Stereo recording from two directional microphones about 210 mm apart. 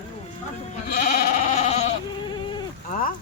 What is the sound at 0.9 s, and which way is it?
Sheep, 45° left (ahead or behind).